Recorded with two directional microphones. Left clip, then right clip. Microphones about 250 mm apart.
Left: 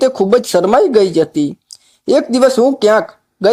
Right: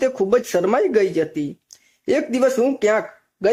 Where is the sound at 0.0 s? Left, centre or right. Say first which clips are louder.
Left 6 dB; centre.